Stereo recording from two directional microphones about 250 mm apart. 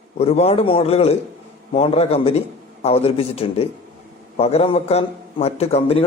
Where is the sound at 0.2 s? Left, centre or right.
Left.